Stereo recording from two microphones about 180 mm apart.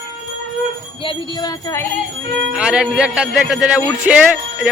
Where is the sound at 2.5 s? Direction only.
5° right (ahead or behind).